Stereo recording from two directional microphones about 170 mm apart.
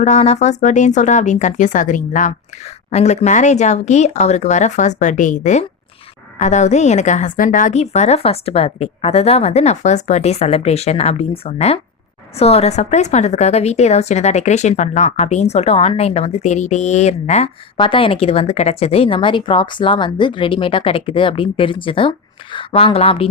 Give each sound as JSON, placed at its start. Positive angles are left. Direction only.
{"t": 0.0, "sound": "a woman's voice", "side_deg": 40}
{"t": 17.7, "sound": "a woman's voice", "side_deg": 30}